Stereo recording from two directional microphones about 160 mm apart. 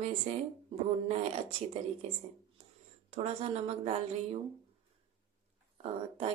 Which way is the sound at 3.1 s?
40° right (ahead or behind).